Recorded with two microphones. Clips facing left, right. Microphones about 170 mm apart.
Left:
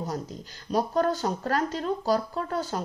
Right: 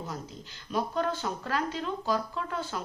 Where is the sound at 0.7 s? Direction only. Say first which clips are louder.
Left 5 dB; 40° left (ahead or behind).